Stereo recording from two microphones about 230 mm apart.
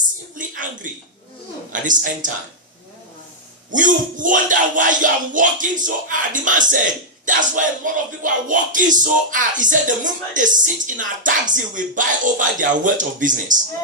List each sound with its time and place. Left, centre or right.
0.3 s a sound: right
1.7 s music: right
3.7 s music: right